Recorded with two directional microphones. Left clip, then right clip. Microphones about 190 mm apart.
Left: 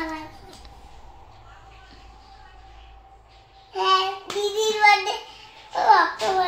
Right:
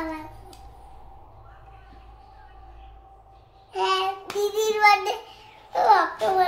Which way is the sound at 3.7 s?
10° right (ahead or behind).